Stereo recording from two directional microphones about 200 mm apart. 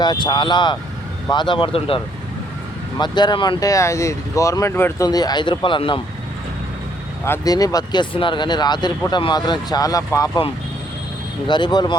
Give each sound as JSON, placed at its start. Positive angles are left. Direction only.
{"t": 0.0, "sound": "speech", "side_deg": 20}
{"t": 3.0, "sound": "speech", "side_deg": 20}
{"t": 7.3, "sound": "speech", "side_deg": 20}
{"t": 11.4, "sound": "speech", "side_deg": 20}